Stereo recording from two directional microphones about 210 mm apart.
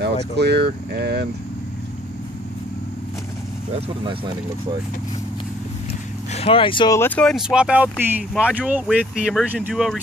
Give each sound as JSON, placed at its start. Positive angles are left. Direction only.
{"t": 0.0, "sound": "speech", "side_deg": -50}
{"t": 6.3, "sound": "speech", "side_deg": 25}
{"t": 7.0, "sound": "speech", "side_deg": 5}